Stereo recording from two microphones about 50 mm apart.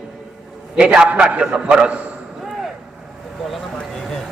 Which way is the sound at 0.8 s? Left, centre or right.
Centre.